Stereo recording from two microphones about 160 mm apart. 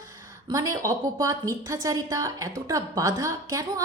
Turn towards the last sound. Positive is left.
turn(degrees=-20)  # may be behind; listen again after turning